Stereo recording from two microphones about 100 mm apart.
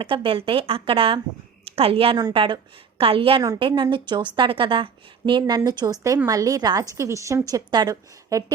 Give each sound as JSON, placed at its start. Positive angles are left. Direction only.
{"t": 0.0, "sound": "a woman's voice", "side_deg": -60}
{"t": 3.6, "sound": "a woman's voice", "side_deg": -55}
{"t": 5.5, "sound": "a woman's voice", "side_deg": -40}